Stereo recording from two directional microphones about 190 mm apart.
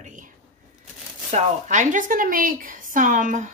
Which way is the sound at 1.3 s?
40° right (ahead or behind).